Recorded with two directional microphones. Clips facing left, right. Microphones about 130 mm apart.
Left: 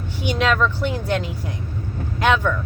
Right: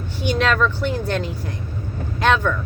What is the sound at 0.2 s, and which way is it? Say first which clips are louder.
Speech: right 1 dB; 15° left (ahead or behind).